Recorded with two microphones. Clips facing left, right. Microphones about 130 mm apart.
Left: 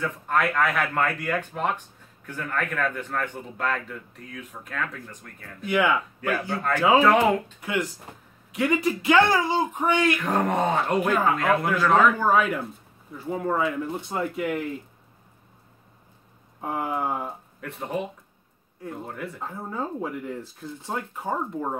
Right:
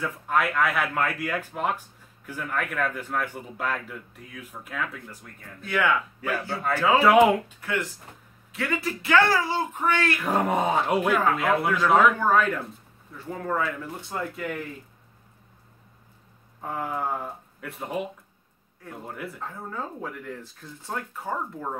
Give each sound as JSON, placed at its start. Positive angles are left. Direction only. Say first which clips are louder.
{"t": 0.0, "sound": "a man's voice", "louder": "left 1 dB", "side_deg": -5}
{"t": 5.6, "sound": "speech", "louder": "left 2 dB", "side_deg": 15}
{"t": 6.5, "sound": "speech", "louder": "left 2 dB", "side_deg": -10}
{"t": 7.6, "sound": "speech", "louder": "left 2 dB", "side_deg": 15}
{"t": 10.2, "sound": "a man's voice", "louder": "even", "side_deg": -5}
{"t": 12.3, "sound": "speech", "louder": "left 1 dB", "side_deg": 10}
{"t": 16.6, "sound": "speech", "louder": "left 2 dB", "side_deg": 15}
{"t": 17.6, "sound": "a man's voice", "louder": "left 1 dB", "side_deg": -5}
{"t": 19.0, "sound": "a man's voice", "louder": "left 1 dB", "side_deg": 0}
{"t": 19.4, "sound": "speech", "louder": "left 5 dB", "side_deg": 20}